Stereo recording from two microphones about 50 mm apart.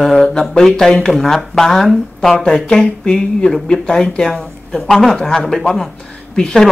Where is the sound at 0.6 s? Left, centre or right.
Centre.